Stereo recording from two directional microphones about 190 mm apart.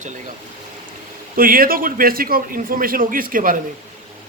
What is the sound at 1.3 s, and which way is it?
A man's voice, 50° right (ahead or behind).